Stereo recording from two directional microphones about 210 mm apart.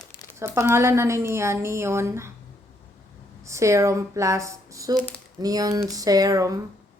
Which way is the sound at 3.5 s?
15° right (ahead or behind).